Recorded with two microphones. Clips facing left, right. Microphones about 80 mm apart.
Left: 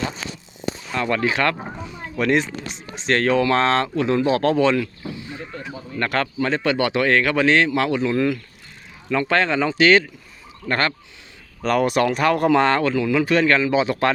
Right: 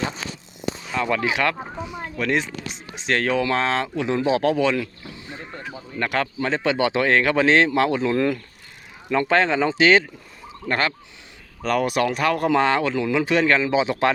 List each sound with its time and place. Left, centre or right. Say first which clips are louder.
0.9 s speech: left 1 dB; centre
3.9 s speech: left 2 dB; centre
4.8 s speech: left 4 dB; right
6.0 s speech: left 2 dB; centre; by 8.4 s right
9.0 s speech: right 1 dB; right
11.6 s speech: left 2 dB; centre
12.5 s speech: left 1 dB; centre